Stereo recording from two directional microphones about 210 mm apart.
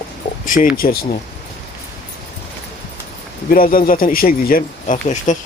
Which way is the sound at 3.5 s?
40° left (ahead or behind).